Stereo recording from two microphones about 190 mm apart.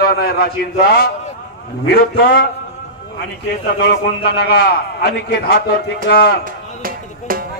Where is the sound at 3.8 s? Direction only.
55° left (ahead or behind).